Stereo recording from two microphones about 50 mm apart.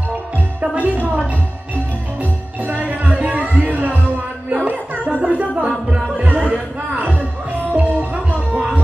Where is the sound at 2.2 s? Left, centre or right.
Right.